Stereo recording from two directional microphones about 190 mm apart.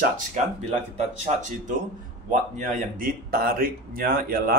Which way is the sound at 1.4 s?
40° right (ahead or behind).